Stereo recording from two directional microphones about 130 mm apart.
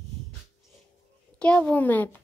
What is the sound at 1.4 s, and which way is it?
Speech, 10° left (ahead or behind).